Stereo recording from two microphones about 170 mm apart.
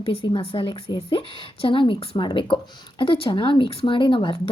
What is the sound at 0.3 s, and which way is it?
A woman's voice, 30° left (ahead or behind).